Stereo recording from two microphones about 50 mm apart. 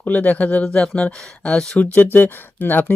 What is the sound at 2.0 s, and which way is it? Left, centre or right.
Speech, left.